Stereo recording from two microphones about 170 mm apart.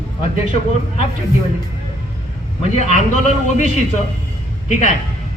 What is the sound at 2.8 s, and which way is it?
Speech, 40° left (ahead or behind).